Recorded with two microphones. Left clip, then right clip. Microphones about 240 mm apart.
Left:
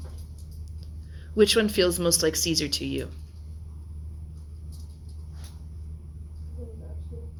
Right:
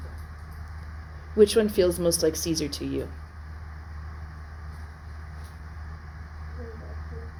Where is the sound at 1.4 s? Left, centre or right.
Left.